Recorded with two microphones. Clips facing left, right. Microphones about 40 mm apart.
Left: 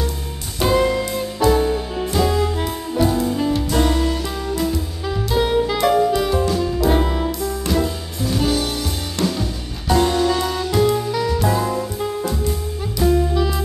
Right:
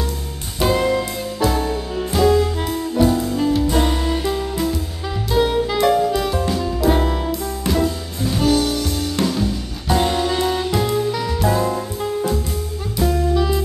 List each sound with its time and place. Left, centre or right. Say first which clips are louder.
0.6 s music: even; centre
3.7 s music: left 1 dB; centre
4.6 s music: left 1 dB; centre
10.0 s music: left 1 dB; centre
13.1 s saxophone: even; centre